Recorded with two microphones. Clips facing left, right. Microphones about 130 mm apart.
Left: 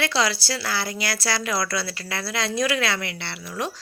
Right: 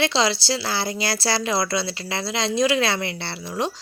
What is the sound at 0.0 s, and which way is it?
A woman's voice, 25° right (ahead or behind).